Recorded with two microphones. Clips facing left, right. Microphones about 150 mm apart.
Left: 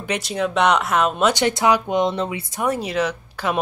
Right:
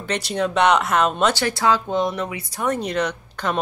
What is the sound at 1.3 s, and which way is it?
Speech, 20° left (ahead or behind).